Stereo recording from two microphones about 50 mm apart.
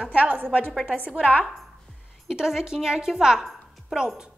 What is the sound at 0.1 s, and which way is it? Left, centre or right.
A woman's voice, right.